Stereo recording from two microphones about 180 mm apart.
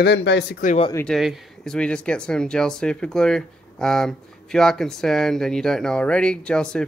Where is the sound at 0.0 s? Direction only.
70° left (ahead or behind).